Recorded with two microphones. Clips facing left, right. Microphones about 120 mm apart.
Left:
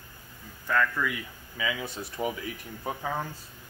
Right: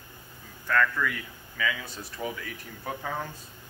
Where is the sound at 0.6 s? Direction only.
10° left (ahead or behind).